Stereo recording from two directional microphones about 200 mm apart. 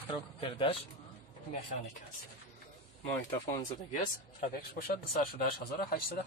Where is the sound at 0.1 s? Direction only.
25° left (ahead or behind).